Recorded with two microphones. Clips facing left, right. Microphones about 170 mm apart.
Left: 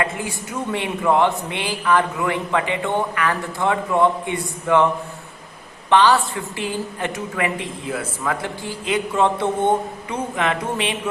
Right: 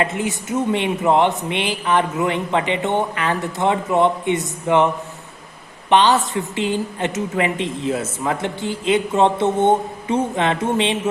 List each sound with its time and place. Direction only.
0.0 s a woman's voice: 20° right (ahead or behind)
5.9 s a woman's voice: 20° right (ahead or behind)